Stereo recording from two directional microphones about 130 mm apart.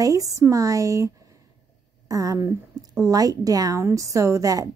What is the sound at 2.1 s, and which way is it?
A woman's voice, 25° right (ahead or behind).